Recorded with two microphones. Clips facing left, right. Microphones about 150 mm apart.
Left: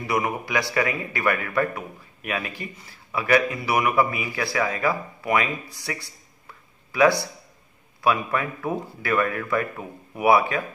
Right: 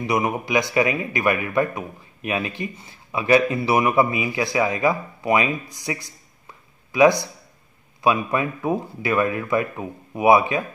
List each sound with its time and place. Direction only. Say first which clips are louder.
0.0 s speech: right 3 dB; 20° right (ahead or behind)